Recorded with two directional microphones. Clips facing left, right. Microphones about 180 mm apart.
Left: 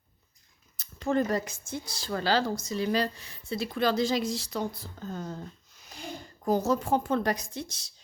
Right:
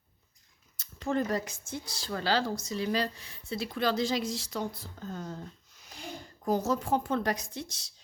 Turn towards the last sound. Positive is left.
turn(degrees=45)  # may be behind; listen again after turning